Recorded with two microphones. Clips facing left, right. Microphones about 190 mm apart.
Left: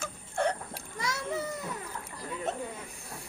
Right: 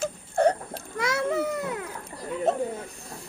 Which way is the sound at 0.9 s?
60° right (ahead or behind).